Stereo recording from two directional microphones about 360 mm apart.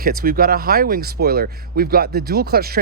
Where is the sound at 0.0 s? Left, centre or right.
Right.